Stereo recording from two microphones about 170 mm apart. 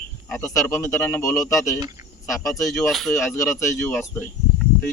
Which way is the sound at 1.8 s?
20° right (ahead or behind).